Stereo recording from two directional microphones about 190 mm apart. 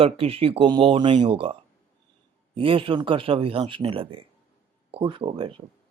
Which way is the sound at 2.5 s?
30° right (ahead or behind).